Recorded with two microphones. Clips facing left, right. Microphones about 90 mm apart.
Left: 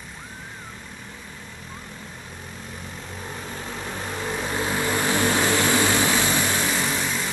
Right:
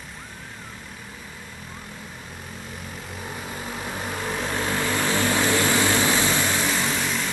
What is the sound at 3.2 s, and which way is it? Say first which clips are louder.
Vehicle: right 1 dB; 10° right (ahead or behind).